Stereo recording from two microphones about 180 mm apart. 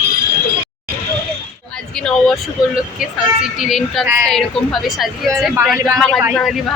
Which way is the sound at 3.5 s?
Centre (ahead or behind).